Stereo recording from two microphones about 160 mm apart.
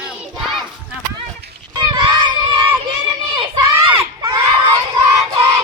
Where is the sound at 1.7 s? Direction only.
25° right (ahead or behind).